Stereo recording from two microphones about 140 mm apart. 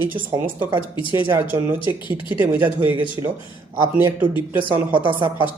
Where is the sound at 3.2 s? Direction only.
30° right (ahead or behind).